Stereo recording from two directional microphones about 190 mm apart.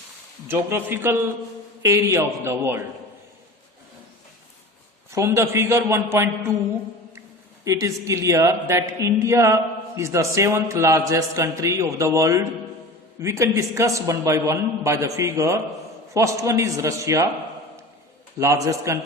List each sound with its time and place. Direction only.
0.4 s a woman's voice: 10° right (ahead or behind)
5.1 s a woman's voice: 15° right (ahead or behind)
7.6 s a woman's voice: 15° right (ahead or behind)
18.3 s a woman's voice: 15° right (ahead or behind)